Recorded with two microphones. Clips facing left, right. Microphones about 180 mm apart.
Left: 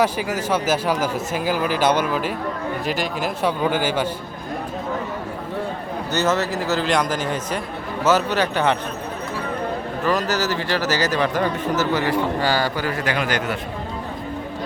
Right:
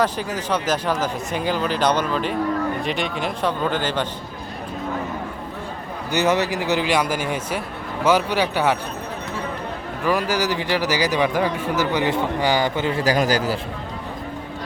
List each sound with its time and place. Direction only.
0.0 s speech: 10° left (ahead or behind)
6.1 s a man's voice: 15° right (ahead or behind)
10.0 s a man's voice: 10° right (ahead or behind); by 13.6 s 35° right (ahead or behind)